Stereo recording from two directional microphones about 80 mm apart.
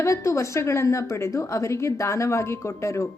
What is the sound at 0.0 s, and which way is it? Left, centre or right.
A woman's voice, left.